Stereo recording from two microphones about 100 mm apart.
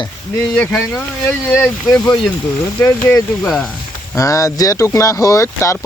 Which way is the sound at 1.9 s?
10° left (ahead or behind).